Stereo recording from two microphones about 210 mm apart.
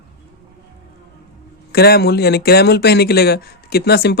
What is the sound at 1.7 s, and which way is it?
Speech, 50° left (ahead or behind).